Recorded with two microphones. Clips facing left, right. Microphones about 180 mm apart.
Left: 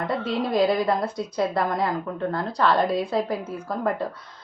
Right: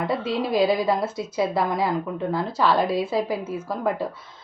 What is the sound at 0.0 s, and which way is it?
A woman's voice, 5° right (ahead or behind).